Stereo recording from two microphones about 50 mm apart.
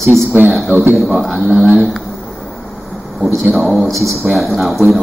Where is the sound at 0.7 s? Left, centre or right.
Right.